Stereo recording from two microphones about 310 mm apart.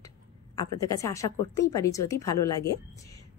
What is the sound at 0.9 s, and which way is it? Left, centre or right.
A woman's voice, centre.